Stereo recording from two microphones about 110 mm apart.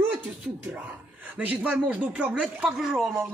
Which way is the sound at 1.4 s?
15° right (ahead or behind).